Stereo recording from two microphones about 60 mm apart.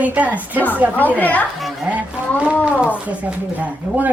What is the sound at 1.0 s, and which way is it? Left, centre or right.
Speech, left.